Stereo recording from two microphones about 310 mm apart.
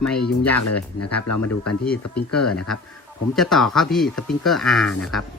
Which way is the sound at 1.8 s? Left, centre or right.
Centre.